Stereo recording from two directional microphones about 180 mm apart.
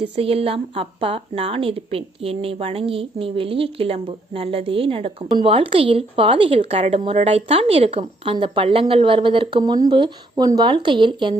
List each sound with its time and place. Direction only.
0.0 s speech: 30° right (ahead or behind)